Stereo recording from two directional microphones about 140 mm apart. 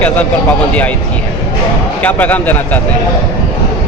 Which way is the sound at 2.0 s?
10° left (ahead or behind).